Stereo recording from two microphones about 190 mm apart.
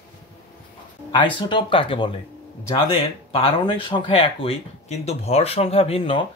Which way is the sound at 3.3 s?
30° left (ahead or behind).